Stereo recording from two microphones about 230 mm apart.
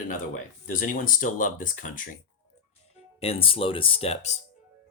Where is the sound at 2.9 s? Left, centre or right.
Left.